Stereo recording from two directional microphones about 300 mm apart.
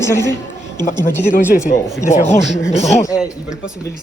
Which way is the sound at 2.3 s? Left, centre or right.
Left.